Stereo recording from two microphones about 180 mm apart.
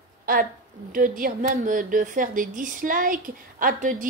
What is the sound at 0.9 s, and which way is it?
Speech, 50° right (ahead or behind).